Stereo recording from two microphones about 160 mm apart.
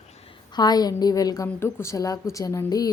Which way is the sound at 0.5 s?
25° left (ahead or behind).